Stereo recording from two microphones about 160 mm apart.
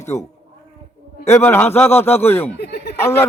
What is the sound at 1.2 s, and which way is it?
A man's voice, 15° left (ahead or behind).